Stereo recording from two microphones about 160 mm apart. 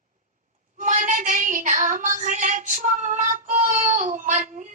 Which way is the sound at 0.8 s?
50° right (ahead or behind).